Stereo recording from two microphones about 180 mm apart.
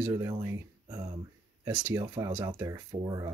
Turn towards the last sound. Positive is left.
turn(degrees=-20)  # may be behind; listen again after turning